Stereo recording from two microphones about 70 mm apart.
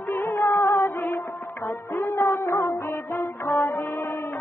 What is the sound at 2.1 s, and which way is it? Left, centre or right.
Music, left.